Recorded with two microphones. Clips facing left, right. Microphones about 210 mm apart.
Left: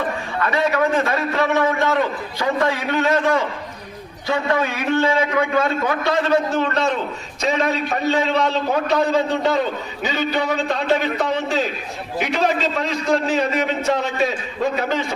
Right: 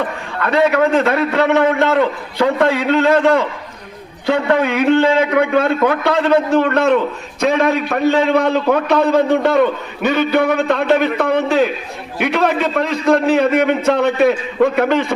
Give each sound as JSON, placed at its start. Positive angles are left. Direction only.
{"t": 0.4, "sound": "a man's voice", "side_deg": -60}